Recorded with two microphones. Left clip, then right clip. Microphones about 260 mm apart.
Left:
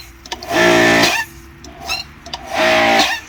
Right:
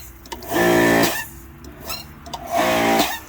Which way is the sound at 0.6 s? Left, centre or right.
Left.